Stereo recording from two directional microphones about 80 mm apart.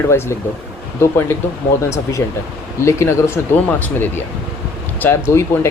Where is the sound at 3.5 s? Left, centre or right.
Left.